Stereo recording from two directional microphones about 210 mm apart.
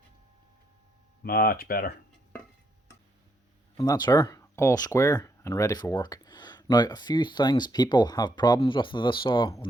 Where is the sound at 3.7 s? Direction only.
20° left (ahead or behind).